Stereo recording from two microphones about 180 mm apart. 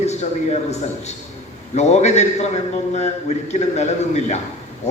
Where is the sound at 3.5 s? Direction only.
40° left (ahead or behind).